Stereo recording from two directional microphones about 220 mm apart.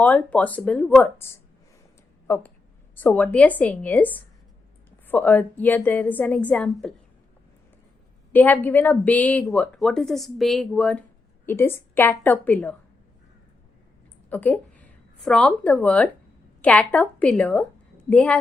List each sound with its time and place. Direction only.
0.0 s a woman's voice: 5° left (ahead or behind)
8.3 s a woman's voice: 10° left (ahead or behind)
14.3 s a woman's voice: 5° left (ahead or behind)